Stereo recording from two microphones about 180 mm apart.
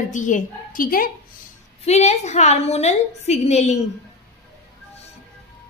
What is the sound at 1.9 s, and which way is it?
A woman's voice, 40° left (ahead or behind).